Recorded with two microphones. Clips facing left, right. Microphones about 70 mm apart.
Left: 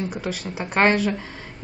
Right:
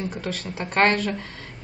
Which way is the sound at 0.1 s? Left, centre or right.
Centre.